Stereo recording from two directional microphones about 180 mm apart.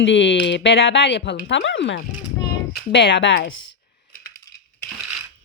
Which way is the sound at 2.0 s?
65° left (ahead or behind).